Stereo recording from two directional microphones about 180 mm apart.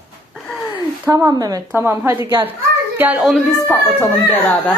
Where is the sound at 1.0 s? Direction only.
20° right (ahead or behind).